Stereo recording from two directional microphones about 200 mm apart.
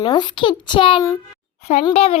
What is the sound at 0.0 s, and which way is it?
A child's voice, 20° left (ahead or behind).